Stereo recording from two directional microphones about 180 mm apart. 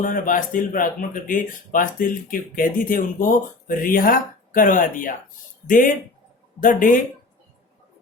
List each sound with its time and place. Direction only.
0.0 s speech: 50° left (ahead or behind)